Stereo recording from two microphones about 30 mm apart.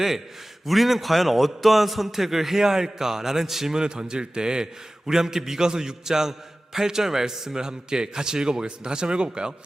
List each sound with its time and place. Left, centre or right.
0.6 s a man's voice: centre
3.8 s a man's voice: right